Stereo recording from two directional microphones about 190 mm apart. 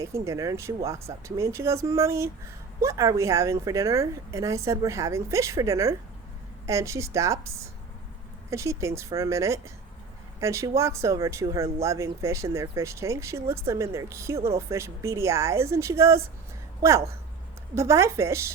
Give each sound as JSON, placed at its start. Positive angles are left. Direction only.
{"t": 0.0, "sound": "speech", "side_deg": -15}
{"t": 17.7, "sound": "speech", "side_deg": -15}